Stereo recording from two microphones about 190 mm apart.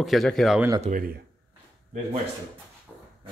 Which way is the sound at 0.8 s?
45° right (ahead or behind).